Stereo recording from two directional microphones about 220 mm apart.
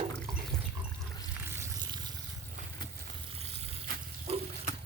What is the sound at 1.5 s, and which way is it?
Water, 15° right (ahead or behind).